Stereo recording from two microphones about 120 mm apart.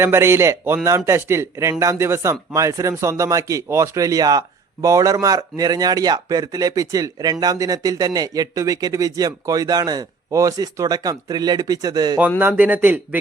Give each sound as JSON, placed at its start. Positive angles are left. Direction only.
{"t": 0.0, "sound": "a man's voice", "side_deg": -20}
{"t": 12.4, "sound": "a man's voice", "side_deg": -15}